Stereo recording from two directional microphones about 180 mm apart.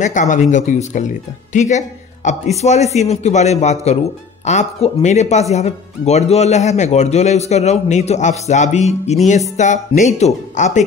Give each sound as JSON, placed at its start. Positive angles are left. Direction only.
{"t": 0.0, "sound": "speech", "side_deg": 45}